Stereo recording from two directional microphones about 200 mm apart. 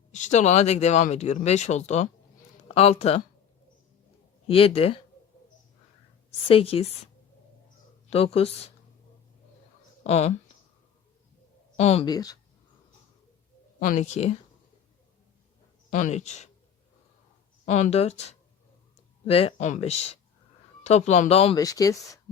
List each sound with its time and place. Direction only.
0.1 s speech: 35° left (ahead or behind)
4.4 s a woman's voice: 30° left (ahead or behind)
6.5 s a woman's voice: 30° left (ahead or behind)
8.1 s a woman's voice: 30° left (ahead or behind)
10.0 s speech: 30° left (ahead or behind)
11.8 s speech: 30° left (ahead or behind)
12.0 s a woman's voice: 20° left (ahead or behind)
13.7 s speech: 40° left (ahead or behind)
15.9 s speech: 40° left (ahead or behind)
17.7 s speech: 35° left (ahead or behind)
21.6 s speech: 15° left (ahead or behind)